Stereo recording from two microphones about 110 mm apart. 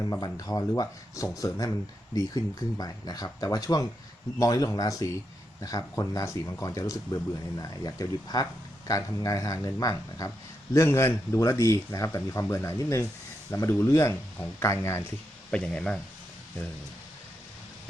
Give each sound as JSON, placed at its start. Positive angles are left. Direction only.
{"t": 0.0, "sound": "speech", "side_deg": 35}
{"t": 15.4, "sound": "speech", "side_deg": 5}